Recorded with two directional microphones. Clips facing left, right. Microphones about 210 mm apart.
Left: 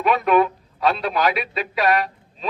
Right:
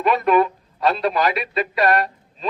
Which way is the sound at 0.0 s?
Centre (ahead or behind).